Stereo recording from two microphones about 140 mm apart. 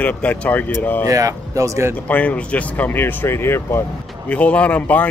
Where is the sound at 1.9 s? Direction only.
10° left (ahead or behind).